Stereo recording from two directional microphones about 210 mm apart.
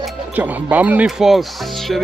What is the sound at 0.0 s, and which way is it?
Speech, 5° right (ahead or behind).